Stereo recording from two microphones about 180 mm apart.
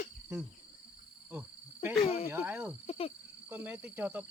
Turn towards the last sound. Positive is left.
turn(degrees=-10)  # may be behind; listen again after turning